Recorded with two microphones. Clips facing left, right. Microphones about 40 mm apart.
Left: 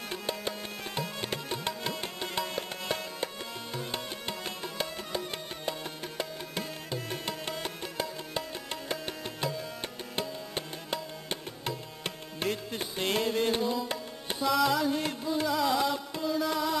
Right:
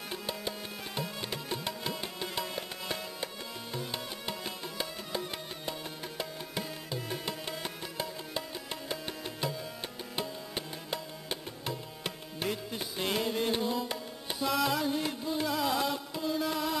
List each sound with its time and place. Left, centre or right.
0.1 s music: centre
1.2 s tabla: centre
1.7 s music: centre
13.6 s tabla: centre
14.4 s music: centre